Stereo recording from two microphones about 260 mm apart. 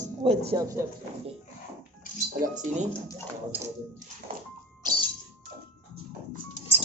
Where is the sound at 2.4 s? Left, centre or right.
Right.